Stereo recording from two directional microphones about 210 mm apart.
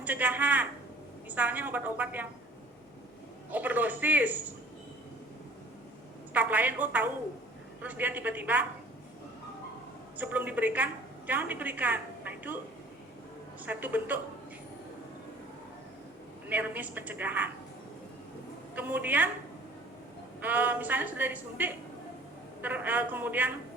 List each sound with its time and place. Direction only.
0.0 s a woman's voice: 5° right (ahead or behind)
3.5 s a woman's voice: 10° right (ahead or behind)
6.3 s a woman's voice: 10° right (ahead or behind)
10.2 s a woman's voice: 10° right (ahead or behind)
13.7 s a woman's voice: 10° right (ahead or behind)
16.5 s a woman's voice: 10° right (ahead or behind)
18.7 s a woman's voice: 10° right (ahead or behind)
20.4 s a woman's voice: 10° right (ahead or behind)